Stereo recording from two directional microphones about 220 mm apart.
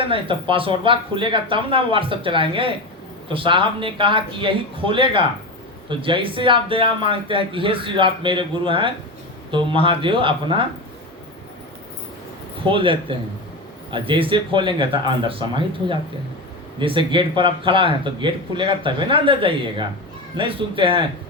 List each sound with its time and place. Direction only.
0.1 s speech: 25° right (ahead or behind)
12.6 s speech: 25° right (ahead or behind)